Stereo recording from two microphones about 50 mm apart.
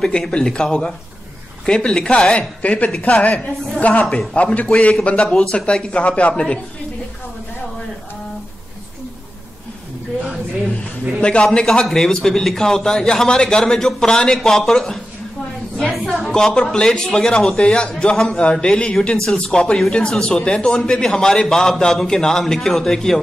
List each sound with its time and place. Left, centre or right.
0.0 s a man's voice: centre
11.1 s a man's voice: left
16.3 s a man's voice: centre